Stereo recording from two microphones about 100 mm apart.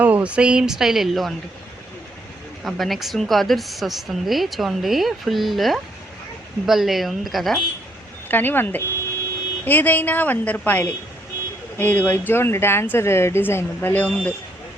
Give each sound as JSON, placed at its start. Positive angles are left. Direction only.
{"t": 0.0, "sound": "speech", "side_deg": -15}
{"t": 2.6, "sound": "a woman's voice", "side_deg": 0}
{"t": 8.3, "sound": "a woman's voice", "side_deg": 20}